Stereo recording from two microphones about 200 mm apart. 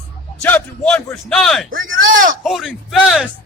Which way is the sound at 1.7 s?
80° right.